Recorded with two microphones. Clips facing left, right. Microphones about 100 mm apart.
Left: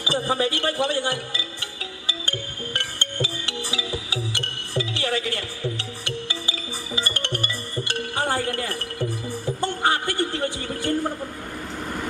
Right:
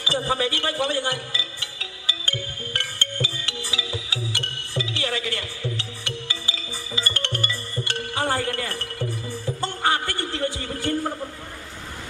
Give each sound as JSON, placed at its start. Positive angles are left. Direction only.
{"t": 0.0, "sound": "speech", "side_deg": 20}
{"t": 1.8, "sound": "music", "side_deg": 25}
{"t": 6.9, "sound": "music", "side_deg": 20}
{"t": 9.6, "sound": "a sound", "side_deg": 20}